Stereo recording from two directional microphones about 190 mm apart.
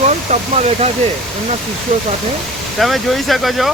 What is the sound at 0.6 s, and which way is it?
Speech, 35° right (ahead or behind).